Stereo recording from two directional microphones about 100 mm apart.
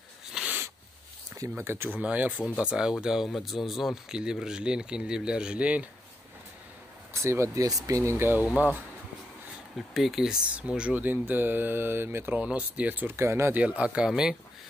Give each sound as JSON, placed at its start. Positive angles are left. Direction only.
{"t": 0.3, "sound": "a sound", "side_deg": -5}
{"t": 1.6, "sound": "speech", "side_deg": -25}
{"t": 7.2, "sound": "speech", "side_deg": -30}
{"t": 9.8, "sound": "speech", "side_deg": 0}
{"t": 13.6, "sound": "speech", "side_deg": -15}